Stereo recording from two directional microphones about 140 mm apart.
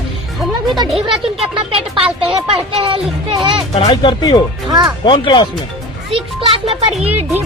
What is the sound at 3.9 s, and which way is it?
Speech, 30° left (ahead or behind).